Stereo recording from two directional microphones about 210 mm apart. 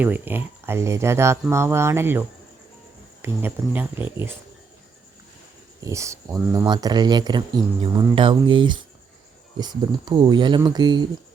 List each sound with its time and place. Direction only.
0.0 s speech: 10° right (ahead or behind)
5.8 s speech: 15° right (ahead or behind)